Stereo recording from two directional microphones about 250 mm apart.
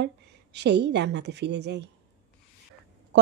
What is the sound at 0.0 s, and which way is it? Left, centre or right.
A woman's voice, right.